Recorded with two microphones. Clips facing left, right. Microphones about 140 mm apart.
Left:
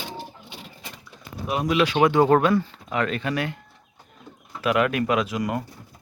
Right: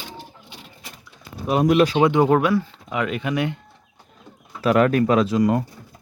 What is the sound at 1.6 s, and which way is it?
Speech, 45° right (ahead or behind).